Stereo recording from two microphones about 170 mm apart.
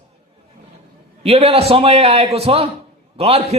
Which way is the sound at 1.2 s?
35° right (ahead or behind).